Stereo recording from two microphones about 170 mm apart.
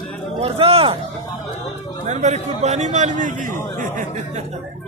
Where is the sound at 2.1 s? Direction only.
45° right (ahead or behind).